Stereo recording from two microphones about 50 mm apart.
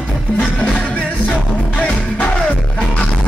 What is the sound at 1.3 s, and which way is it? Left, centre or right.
Music, left.